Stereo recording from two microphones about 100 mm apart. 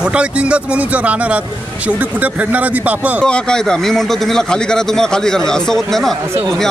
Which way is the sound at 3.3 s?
10° left (ahead or behind).